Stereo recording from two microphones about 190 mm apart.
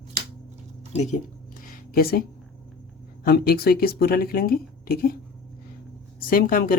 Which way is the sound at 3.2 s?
55° left (ahead or behind).